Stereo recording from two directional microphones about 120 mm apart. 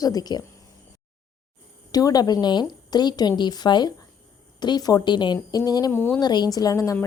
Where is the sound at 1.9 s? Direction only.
30° left (ahead or behind).